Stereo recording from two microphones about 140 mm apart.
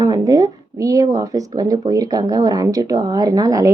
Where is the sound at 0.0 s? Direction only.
25° right (ahead or behind).